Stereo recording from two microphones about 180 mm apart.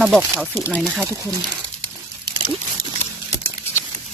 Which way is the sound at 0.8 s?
Centre (ahead or behind).